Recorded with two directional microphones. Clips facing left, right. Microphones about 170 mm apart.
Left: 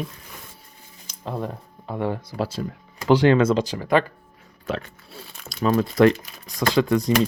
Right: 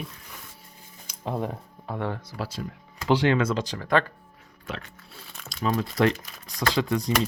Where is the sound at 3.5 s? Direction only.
10° left (ahead or behind).